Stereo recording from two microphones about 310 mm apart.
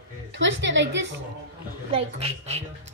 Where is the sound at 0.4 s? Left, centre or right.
Right.